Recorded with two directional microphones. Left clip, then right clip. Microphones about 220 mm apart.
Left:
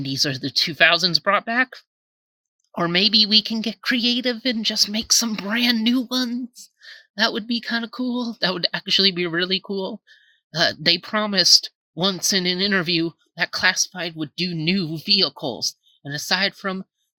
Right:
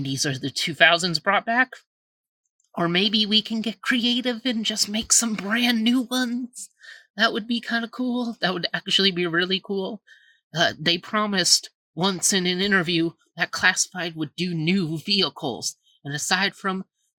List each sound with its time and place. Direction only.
0.0 s speech: 15° left (ahead or behind)
6.6 s a sound: 15° left (ahead or behind)
7.2 s speech: 15° left (ahead or behind)